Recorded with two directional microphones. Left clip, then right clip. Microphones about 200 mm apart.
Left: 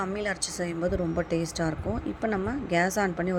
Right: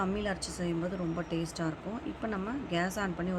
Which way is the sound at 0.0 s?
20° left (ahead or behind).